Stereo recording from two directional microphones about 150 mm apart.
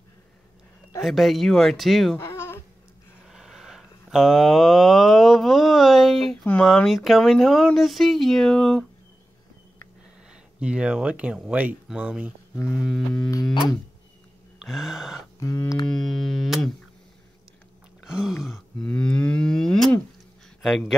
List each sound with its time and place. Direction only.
1.0 s speech: centre (ahead or behind)
2.2 s a sound: 15° left (ahead or behind)
3.3 s a sound: centre (ahead or behind)
10.3 s speech: 5° right (ahead or behind)
14.7 s speech: centre (ahead or behind)
15.4 s music: 20° left (ahead or behind)
15.9 s speech: centre (ahead or behind)
18.0 s grunt: 5° right (ahead or behind)
18.9 s cattle: 10° left (ahead or behind)